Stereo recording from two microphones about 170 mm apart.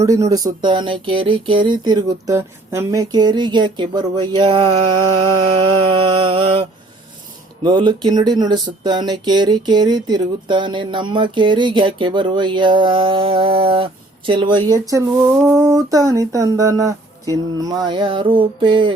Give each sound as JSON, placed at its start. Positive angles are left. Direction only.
{"t": 0.0, "sound": "speech", "side_deg": -20}